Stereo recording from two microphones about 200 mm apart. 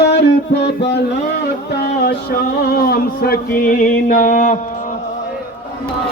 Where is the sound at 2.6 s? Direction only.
50° left (ahead or behind).